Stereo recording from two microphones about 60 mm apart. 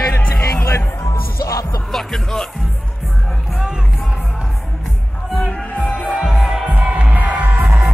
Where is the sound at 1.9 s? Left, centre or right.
Centre.